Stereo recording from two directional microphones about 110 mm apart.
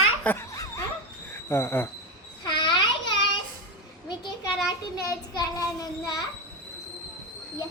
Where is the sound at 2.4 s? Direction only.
45° left (ahead or behind).